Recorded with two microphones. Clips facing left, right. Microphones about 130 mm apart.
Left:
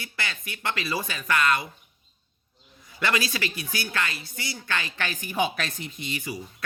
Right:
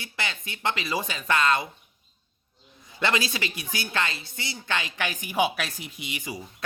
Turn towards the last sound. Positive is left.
turn(degrees=-20)  # may be behind; listen again after turning